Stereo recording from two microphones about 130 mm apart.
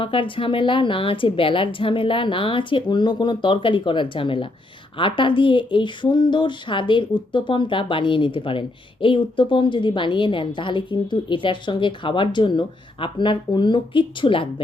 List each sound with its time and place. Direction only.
0.0 s speech: 40° left (ahead or behind)